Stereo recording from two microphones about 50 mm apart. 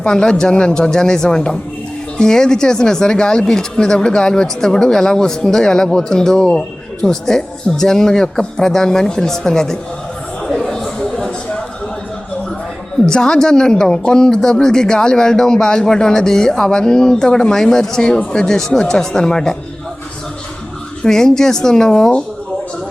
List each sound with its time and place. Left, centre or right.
0.1 s speech: centre
10.4 s a sound: centre
13.1 s speech: centre
21.0 s speech: centre